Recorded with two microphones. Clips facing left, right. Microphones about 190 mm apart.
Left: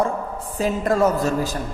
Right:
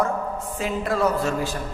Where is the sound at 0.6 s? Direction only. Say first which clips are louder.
Left 5 dB; 45° left (ahead or behind).